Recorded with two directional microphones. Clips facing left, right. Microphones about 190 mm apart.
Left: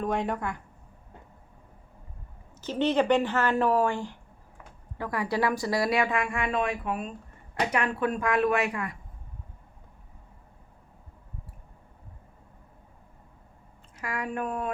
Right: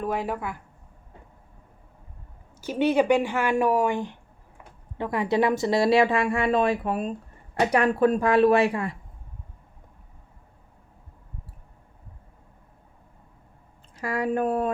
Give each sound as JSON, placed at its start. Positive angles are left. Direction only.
{"t": 0.0, "sound": "speech", "side_deg": -5}
{"t": 2.6, "sound": "speech", "side_deg": -10}
{"t": 13.9, "sound": "speech", "side_deg": -30}